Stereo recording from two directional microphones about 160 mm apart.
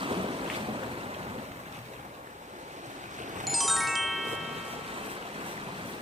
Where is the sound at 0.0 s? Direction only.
35° right (ahead or behind).